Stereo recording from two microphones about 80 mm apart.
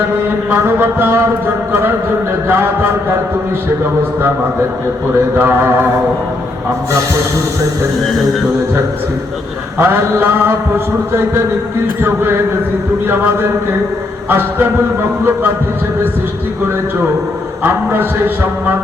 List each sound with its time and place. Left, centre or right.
0.3 s a sound: right
2.5 s mantra: right
5.4 s mantra: right
9.7 s mantra: right
12.0 s mantra: right
14.3 s mantra: right
17.6 s mantra: right